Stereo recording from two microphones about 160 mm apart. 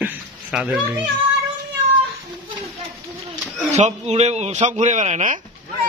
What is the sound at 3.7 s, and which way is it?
Speech, 45° right (ahead or behind).